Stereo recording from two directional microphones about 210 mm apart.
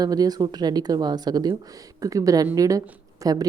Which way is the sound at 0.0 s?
20° right (ahead or behind).